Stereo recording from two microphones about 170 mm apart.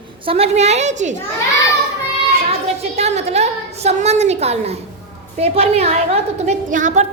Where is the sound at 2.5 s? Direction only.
40° right (ahead or behind).